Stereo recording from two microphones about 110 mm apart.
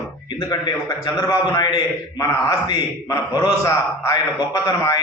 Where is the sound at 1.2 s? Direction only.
30° left (ahead or behind).